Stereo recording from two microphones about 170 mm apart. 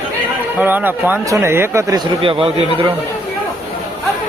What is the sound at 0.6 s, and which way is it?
Speech, 10° right (ahead or behind).